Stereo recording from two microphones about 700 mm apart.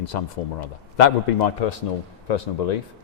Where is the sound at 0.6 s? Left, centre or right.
Left.